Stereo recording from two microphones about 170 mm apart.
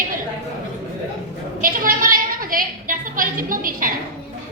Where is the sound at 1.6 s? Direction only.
55° right (ahead or behind).